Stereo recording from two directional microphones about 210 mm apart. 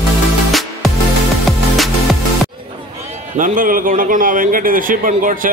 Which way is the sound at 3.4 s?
40° right (ahead or behind).